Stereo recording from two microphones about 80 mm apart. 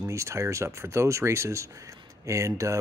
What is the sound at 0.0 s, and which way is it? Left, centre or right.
Speech, right.